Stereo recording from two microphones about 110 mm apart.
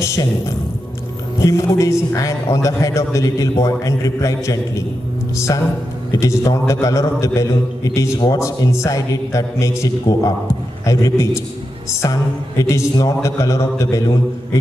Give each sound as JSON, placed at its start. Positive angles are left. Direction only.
{"t": 0.0, "sound": "a man's voice", "side_deg": 30}
{"t": 1.4, "sound": "a man's voice", "side_deg": 30}